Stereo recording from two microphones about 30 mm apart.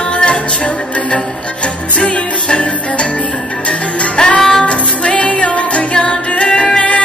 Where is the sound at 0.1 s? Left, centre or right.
Left.